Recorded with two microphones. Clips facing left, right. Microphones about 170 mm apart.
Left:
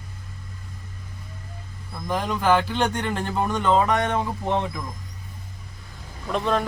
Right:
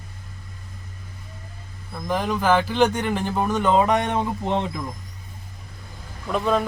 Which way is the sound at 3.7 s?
15° right (ahead or behind).